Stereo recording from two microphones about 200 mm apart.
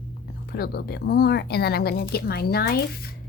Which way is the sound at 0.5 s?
50° left (ahead or behind).